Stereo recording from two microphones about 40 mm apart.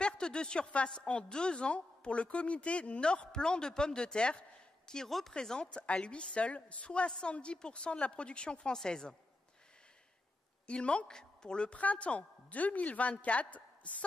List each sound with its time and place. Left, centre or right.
0.0 s a woman's voice: left
0.8 s a woman's voice: centre
5.0 s speech: centre
5.3 s a woman's voice: centre
5.6 s a woman's voice: left
10.7 s a woman's voice: left
11.8 s a woman's voice: left